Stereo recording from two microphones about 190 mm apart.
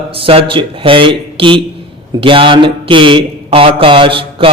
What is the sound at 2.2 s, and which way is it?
Speech, 25° right (ahead or behind).